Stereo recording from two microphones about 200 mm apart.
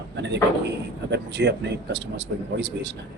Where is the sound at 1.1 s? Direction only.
60° right (ahead or behind).